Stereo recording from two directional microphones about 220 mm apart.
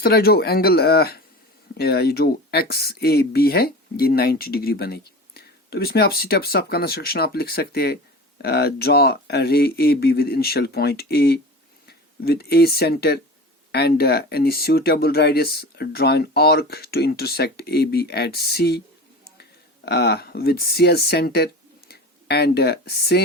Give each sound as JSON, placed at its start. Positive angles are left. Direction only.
{"t": 0.0, "sound": "speech", "side_deg": 45}